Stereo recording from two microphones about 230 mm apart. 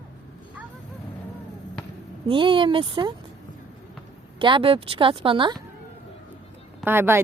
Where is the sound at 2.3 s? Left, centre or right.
Right.